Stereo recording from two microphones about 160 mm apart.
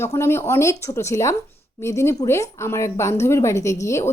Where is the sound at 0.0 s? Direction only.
15° left (ahead or behind).